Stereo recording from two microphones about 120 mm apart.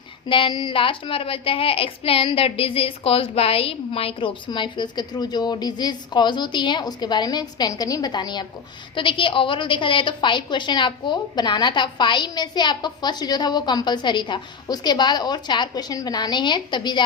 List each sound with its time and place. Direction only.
0.3 s a woman's voice: 45° left (ahead or behind)